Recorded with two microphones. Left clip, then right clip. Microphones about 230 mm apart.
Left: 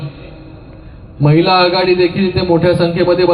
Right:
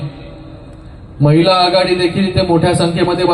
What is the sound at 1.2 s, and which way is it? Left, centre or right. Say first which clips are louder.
A man's voice: even; right.